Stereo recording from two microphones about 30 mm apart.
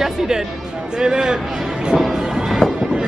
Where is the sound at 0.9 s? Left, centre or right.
Right.